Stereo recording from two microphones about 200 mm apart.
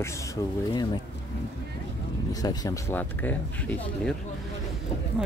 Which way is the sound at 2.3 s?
20° left (ahead or behind).